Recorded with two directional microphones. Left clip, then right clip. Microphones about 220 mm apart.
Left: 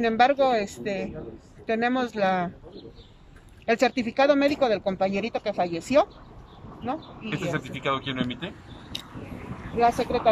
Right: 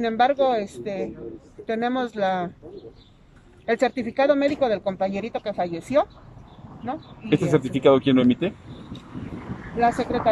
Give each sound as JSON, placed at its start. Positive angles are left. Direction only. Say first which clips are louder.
{"t": 0.0, "sound": "speech", "louder": "right 1 dB", "side_deg": 0}
{"t": 3.6, "sound": "speech", "louder": "right 1 dB", "side_deg": 0}
{"t": 7.5, "sound": "speech", "louder": "right 12 dB", "side_deg": -45}
{"t": 9.8, "sound": "speech", "louder": "right 1 dB", "side_deg": 0}